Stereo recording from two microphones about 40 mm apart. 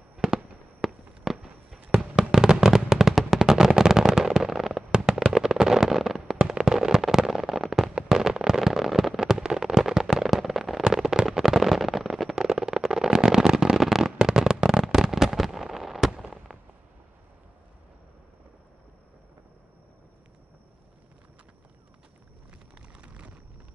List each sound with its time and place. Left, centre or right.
0.2 s fireworks: centre
4.9 s fireworks: centre
10.8 s firecracker: centre
12.4 s fireworks: centre
22.9 s a sound: right